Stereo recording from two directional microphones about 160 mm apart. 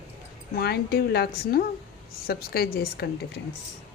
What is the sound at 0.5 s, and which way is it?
A woman's voice, 80° left.